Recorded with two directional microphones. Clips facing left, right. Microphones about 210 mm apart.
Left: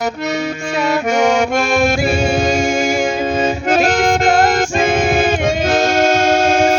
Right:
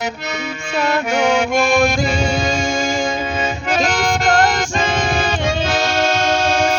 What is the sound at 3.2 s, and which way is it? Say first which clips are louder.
Accordion: left 6 dB; 45° left (ahead or behind).